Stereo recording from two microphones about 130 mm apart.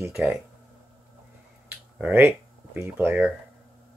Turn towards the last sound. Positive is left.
turn(degrees=-15)  # may be behind; listen again after turning